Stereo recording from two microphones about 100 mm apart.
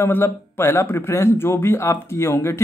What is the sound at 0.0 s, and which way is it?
Speech, 25° left (ahead or behind).